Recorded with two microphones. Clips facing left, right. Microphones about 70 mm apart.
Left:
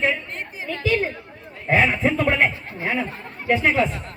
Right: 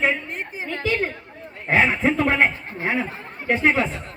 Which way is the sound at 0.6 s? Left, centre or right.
Right.